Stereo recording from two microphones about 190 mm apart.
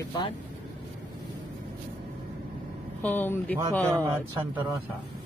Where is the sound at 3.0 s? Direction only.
10° left (ahead or behind).